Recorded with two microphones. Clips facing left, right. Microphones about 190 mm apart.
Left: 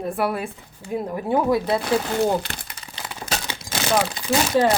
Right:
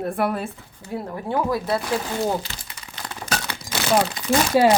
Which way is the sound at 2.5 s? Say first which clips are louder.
Left 4 dB; 60° left (ahead or behind).